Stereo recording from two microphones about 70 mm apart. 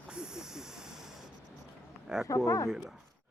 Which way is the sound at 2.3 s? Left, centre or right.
Left.